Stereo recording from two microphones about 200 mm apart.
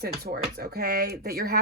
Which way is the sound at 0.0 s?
50° right (ahead or behind).